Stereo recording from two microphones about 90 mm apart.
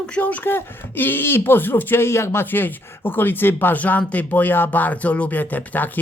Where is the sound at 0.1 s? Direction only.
15° left (ahead or behind).